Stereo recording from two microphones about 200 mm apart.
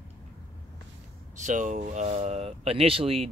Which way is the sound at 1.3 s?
40° right (ahead or behind).